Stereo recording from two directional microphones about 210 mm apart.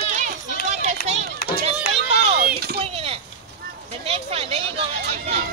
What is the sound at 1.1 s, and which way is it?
Children playing, 30° right (ahead or behind).